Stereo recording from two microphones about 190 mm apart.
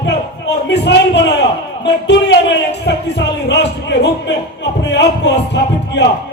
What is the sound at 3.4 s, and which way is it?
A man's voice, 65° left (ahead or behind).